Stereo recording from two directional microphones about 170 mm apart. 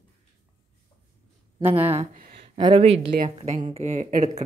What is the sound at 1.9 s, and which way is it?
Speech, 40° right (ahead or behind).